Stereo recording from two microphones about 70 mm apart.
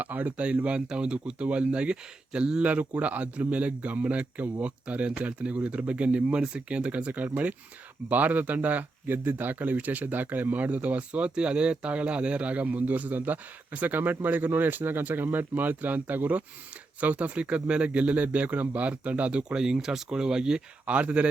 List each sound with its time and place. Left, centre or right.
0.0 s speech: right